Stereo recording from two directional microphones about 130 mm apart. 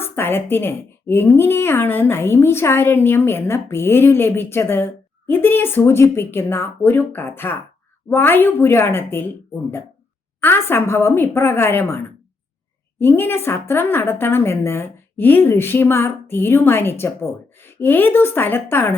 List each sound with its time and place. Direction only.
0.0 s a woman's voice: 15° left (ahead or behind)
10.4 s a woman's voice: 15° left (ahead or behind)
13.0 s a woman's voice: 15° left (ahead or behind)